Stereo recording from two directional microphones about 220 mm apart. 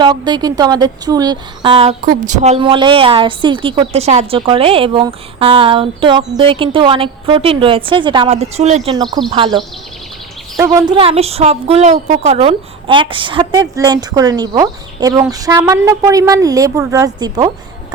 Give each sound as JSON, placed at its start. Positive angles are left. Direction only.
{"t": 0.0, "sound": "a woman's voice", "side_deg": -20}
{"t": 10.6, "sound": "a woman's voice", "side_deg": -15}